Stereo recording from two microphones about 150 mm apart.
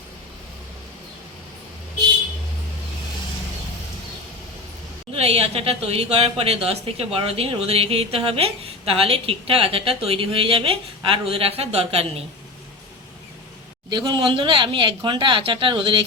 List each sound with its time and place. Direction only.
5.1 s speech: 40° right (ahead or behind)
13.9 s speech: 30° right (ahead or behind)